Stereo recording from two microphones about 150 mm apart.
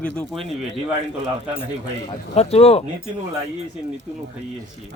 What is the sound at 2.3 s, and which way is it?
Speech, 45° left (ahead or behind).